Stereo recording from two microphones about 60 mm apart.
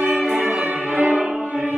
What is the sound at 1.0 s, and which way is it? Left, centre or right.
Music, centre.